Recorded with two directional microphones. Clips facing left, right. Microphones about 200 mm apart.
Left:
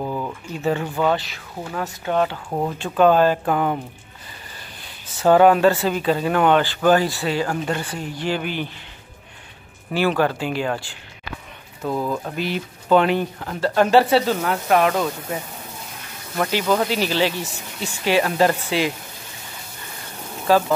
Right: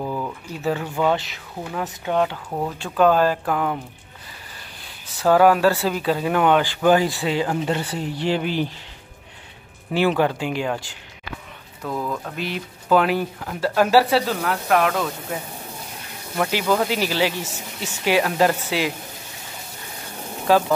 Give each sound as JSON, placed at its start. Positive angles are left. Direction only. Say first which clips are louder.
{"t": 0.0, "sound": "a sound", "louder": "left 1 dB", "side_deg": 10}
{"t": 0.7, "sound": "speech", "louder": "left 1 dB", "side_deg": -5}
{"t": 1.1, "sound": "speech", "louder": "even", "side_deg": -20}
{"t": 1.6, "sound": "speech", "louder": "even", "side_deg": -5}
{"t": 2.3, "sound": "speech", "louder": "left 2 dB", "side_deg": 15}
{"t": 2.8, "sound": "speech", "louder": "left 2 dB", "side_deg": 0}
{"t": 5.2, "sound": "speech", "louder": "left 2 dB", "side_deg": 0}
{"t": 9.9, "sound": "speech", "louder": "even", "side_deg": -20}
{"t": 11.8, "sound": "speech", "louder": "left 3 dB", "side_deg": 25}
{"t": 12.4, "sound": "speech", "louder": "left 3 dB", "side_deg": 0}
{"t": 16.3, "sound": "speech", "louder": "left 1 dB", "side_deg": -10}
{"t": 20.4, "sound": "speech", "louder": "even", "side_deg": -15}